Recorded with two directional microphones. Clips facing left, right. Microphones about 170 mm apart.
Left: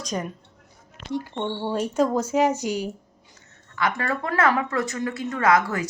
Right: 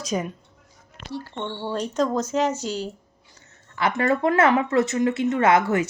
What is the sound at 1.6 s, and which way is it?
Speech, 10° left (ahead or behind).